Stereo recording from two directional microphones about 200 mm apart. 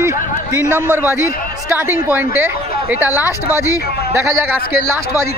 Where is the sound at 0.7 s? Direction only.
10° left (ahead or behind).